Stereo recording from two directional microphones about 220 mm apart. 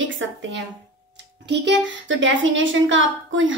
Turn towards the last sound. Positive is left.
turn(degrees=-60)  # may be behind; listen again after turning